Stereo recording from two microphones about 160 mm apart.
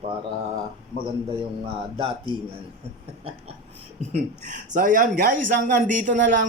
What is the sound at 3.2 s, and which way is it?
Mantra, 40° right (ahead or behind).